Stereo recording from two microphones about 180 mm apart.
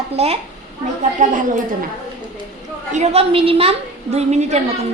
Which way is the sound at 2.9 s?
35° right (ahead or behind).